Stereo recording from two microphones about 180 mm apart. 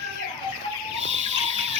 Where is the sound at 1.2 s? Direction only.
35° right (ahead or behind).